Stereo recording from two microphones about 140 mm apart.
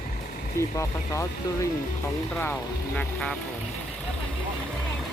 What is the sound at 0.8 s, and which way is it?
Speech, 20° left (ahead or behind).